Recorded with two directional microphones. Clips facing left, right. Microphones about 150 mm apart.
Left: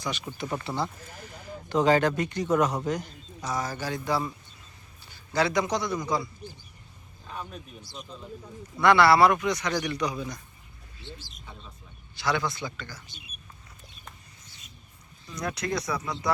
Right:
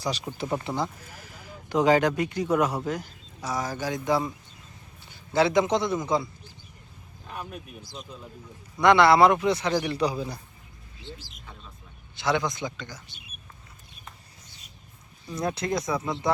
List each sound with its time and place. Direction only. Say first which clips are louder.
0.3 s a man's voice: right 1 dB; 20° right (ahead or behind)
7.3 s speech: right 1 dB; 10° right (ahead or behind)
8.8 s speech: right 1 dB; 20° right (ahead or behind)
12.1 s speech: right 2 dB; 20° right (ahead or behind)
15.3 s speech: right 3 dB; 25° right (ahead or behind)